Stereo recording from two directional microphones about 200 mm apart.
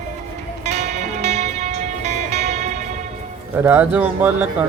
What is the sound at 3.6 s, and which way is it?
Speech, 10° right (ahead or behind).